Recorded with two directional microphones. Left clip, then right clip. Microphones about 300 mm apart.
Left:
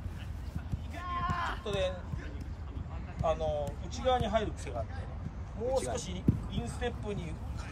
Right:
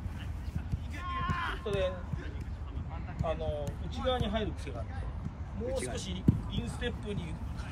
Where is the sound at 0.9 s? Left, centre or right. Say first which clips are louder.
Left 1 dB; left.